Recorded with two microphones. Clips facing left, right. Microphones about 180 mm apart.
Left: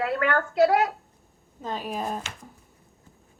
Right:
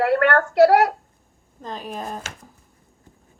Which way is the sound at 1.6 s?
5° left (ahead or behind).